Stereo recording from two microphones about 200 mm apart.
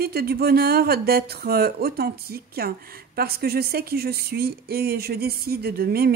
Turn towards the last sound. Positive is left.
turn(degrees=-50)  # may be behind; listen again after turning